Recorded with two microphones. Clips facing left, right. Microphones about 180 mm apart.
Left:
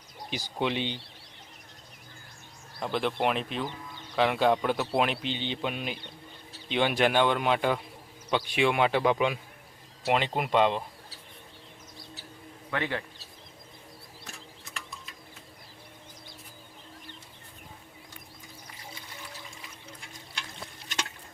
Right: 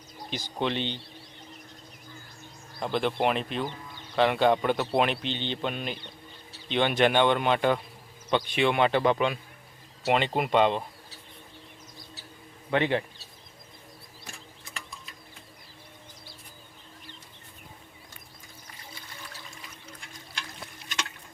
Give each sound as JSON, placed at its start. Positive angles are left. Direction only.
{"t": 0.3, "sound": "speech", "side_deg": 10}
{"t": 2.8, "sound": "a man's voice", "side_deg": 0}
{"t": 12.7, "sound": "a man's voice", "side_deg": -20}
{"t": 14.3, "sound": "a sound", "side_deg": 0}